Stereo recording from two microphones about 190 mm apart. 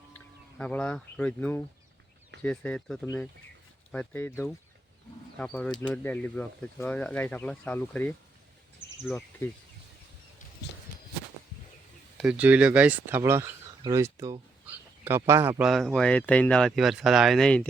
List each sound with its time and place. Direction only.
0.6 s speech: 5° left (ahead or behind)
12.2 s speech: 5° right (ahead or behind)